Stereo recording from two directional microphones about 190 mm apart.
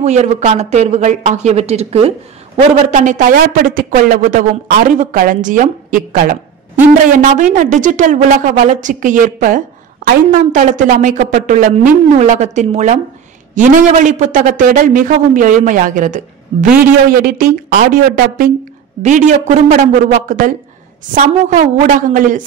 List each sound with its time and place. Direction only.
0.0 s a man's voice: 35° right (ahead or behind)